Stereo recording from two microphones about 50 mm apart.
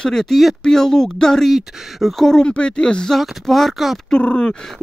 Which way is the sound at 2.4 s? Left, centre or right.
Centre.